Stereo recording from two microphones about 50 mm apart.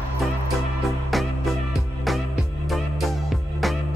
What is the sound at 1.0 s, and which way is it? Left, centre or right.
Music, centre.